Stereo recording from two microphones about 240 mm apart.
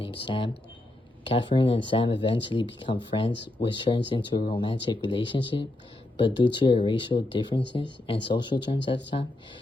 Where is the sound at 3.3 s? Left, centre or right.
Left.